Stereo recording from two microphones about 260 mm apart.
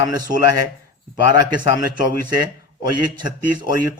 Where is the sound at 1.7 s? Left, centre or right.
Left.